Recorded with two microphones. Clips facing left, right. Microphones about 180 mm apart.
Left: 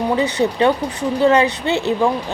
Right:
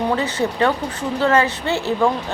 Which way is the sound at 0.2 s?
15° left (ahead or behind).